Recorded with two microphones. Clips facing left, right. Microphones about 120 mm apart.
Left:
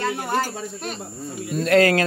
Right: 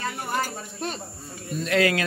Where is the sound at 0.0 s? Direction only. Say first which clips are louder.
Left 5 dB; 75° left (ahead or behind).